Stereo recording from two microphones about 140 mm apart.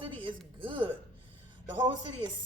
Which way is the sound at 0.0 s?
35° right (ahead or behind).